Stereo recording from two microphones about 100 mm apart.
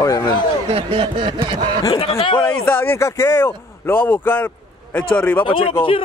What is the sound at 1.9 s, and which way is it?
Speech, 65° left (ahead or behind).